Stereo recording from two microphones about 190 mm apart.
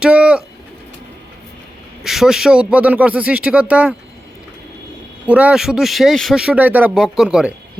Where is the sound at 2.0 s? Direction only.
Centre (ahead or behind).